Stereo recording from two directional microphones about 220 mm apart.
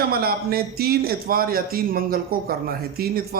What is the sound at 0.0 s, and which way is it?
A man's voice, 45° right (ahead or behind).